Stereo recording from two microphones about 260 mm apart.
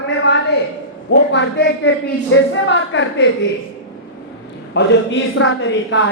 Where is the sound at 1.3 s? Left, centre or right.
Left.